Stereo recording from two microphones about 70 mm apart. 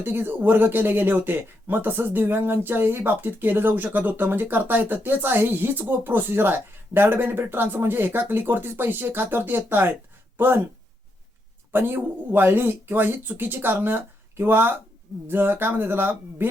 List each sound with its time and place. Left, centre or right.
0.0 s speech: right
11.7 s speech: right